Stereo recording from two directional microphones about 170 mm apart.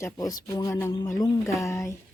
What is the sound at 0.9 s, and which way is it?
Speech, 20° left (ahead or behind).